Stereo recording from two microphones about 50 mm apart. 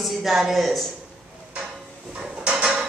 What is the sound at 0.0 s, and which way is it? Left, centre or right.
Speech, centre.